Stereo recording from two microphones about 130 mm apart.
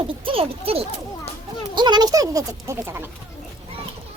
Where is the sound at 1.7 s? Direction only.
35° right (ahead or behind).